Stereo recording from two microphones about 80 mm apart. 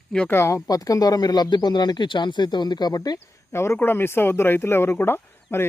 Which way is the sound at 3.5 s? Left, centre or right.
Left.